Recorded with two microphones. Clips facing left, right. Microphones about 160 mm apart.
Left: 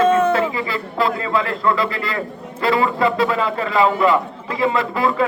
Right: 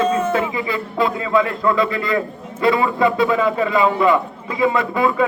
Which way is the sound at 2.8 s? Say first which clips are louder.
Right 1 dB; 20° right (ahead or behind).